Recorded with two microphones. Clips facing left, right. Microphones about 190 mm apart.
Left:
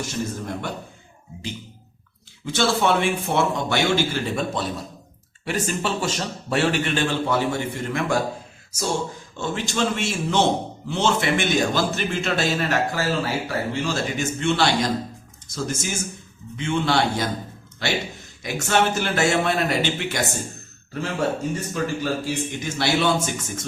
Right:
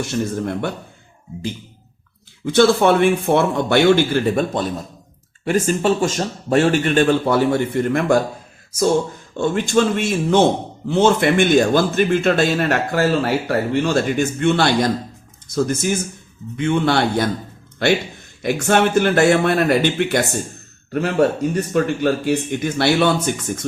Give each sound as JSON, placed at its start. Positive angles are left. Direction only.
{"t": 2.4, "sound": "a man's voice", "side_deg": -55}
{"t": 8.7, "sound": "a sound", "side_deg": -55}
{"t": 9.4, "sound": "a man's voice", "side_deg": -50}